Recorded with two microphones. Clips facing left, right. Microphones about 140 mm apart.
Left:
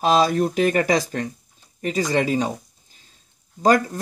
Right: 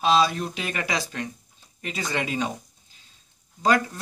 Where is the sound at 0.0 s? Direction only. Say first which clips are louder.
Left 4 dB; 45° left (ahead or behind).